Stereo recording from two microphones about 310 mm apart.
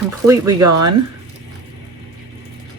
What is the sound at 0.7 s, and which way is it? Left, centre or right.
Speech, right.